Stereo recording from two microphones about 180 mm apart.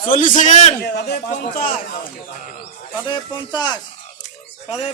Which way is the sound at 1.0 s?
55° left (ahead or behind).